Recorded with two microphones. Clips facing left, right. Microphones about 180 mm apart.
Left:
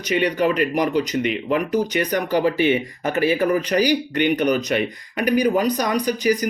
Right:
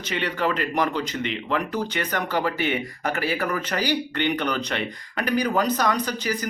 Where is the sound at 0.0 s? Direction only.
15° left (ahead or behind).